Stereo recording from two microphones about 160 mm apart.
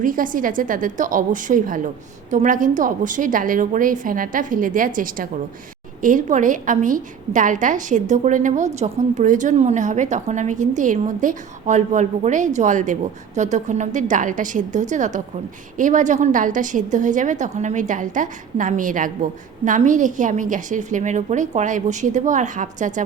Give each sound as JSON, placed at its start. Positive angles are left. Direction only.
{"t": 0.0, "sound": "a woman's voice", "side_deg": -55}